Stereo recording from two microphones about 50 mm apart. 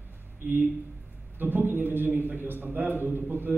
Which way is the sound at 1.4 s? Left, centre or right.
Right.